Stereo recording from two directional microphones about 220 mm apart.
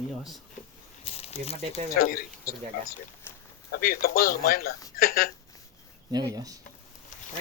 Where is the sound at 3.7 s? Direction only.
40° left (ahead or behind).